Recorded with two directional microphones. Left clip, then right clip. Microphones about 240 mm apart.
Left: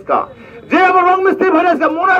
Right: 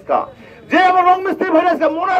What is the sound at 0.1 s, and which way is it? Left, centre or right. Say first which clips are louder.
A man's voice: left 2 dB; left.